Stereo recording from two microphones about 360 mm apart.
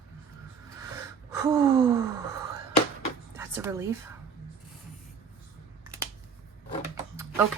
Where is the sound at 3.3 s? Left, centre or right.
Centre.